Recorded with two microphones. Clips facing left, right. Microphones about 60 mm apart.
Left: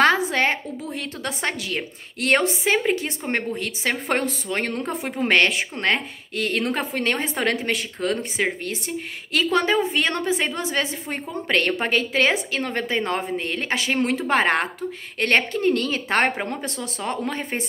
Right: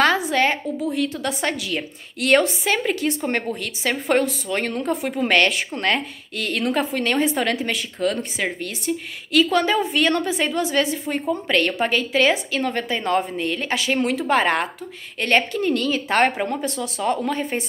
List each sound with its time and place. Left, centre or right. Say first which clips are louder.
0.0 s a woman's voice: even; left